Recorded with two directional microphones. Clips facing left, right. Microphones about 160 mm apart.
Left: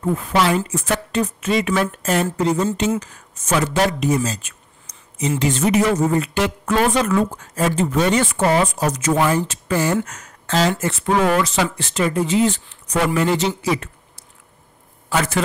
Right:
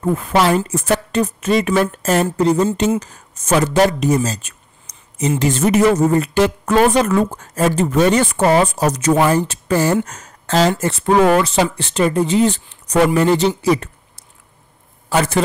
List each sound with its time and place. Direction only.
0.0 s speech: 40° right (ahead or behind)
15.0 s a man's voice: 35° right (ahead or behind)